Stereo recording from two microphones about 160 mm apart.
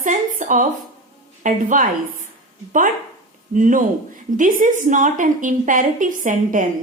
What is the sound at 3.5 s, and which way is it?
A woman's voice, 55° right (ahead or behind).